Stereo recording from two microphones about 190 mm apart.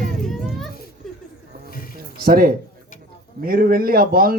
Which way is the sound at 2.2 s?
50° right (ahead or behind).